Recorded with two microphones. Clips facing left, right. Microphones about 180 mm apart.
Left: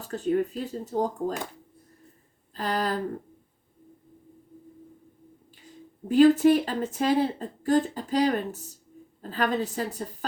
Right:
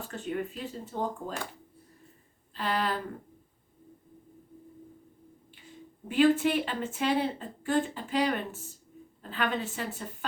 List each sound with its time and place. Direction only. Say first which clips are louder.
0.0 s speech: left 8 dB; 35° left (ahead or behind)
2.6 s speech: left 3 dB; 40° left (ahead or behind)
5.6 s speech: left 8 dB; 40° left (ahead or behind)